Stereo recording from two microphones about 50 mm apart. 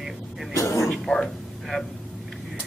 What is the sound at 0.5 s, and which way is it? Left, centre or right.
Speech, left.